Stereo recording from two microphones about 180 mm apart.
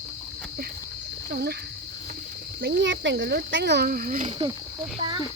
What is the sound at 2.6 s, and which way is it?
Speech, 90° right.